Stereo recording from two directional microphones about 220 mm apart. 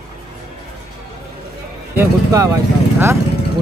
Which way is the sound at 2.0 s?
15° right (ahead or behind).